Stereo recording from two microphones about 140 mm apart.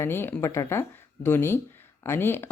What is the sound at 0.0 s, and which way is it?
Speech, 15° left (ahead or behind).